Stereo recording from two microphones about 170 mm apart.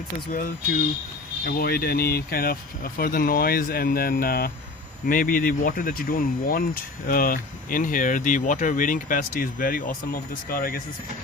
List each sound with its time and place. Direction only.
0.3 s speech: 55° left (ahead or behind)